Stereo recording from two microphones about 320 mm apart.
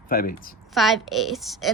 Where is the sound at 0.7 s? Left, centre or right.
Centre.